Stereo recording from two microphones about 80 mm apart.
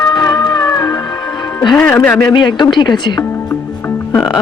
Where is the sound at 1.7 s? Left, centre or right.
Left.